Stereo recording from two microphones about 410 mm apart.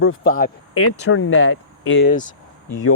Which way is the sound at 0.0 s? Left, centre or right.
Left.